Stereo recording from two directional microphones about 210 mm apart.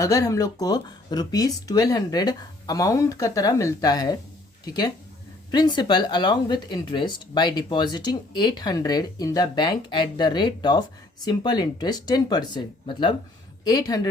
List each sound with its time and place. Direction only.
0.0 s speech: 15° left (ahead or behind)